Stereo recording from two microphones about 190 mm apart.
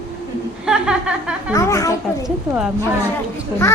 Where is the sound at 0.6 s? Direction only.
5° right (ahead or behind).